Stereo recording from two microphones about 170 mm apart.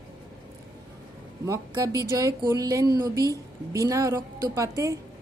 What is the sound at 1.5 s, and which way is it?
A woman's voice, 20° right (ahead or behind).